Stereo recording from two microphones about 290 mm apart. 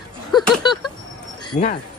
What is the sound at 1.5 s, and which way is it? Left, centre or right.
Speech, left.